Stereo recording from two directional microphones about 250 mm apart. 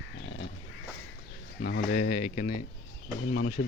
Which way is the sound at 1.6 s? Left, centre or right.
Left.